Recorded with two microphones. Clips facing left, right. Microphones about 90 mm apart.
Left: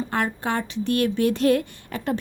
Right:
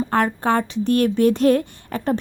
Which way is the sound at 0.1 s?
40° right (ahead or behind).